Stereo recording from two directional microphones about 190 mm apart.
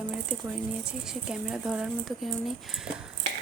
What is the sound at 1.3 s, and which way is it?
Speech, 5° right (ahead or behind).